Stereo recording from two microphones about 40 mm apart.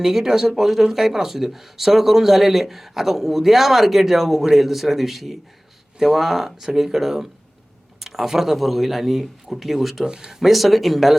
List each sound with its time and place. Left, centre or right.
0.0 s speech: centre
10.1 s speech: centre
10.4 s speech: centre